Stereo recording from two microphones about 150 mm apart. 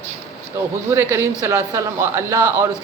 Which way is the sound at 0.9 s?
15° right (ahead or behind).